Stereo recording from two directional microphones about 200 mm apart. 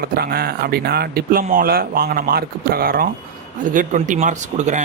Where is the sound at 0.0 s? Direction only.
50° right (ahead or behind).